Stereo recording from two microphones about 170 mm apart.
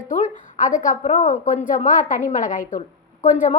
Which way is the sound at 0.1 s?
45° left (ahead or behind).